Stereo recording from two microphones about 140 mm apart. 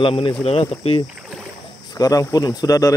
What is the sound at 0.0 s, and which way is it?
Speech, 40° left (ahead or behind).